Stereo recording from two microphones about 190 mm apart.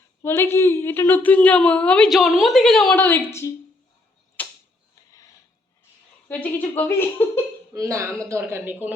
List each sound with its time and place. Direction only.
0.2 s a woman's voice: 10° left (ahead or behind)
4.4 s tick-tock: 10° left (ahead or behind)
6.2 s a woman's voice: 10° left (ahead or behind)
7.7 s speech: 15° right (ahead or behind)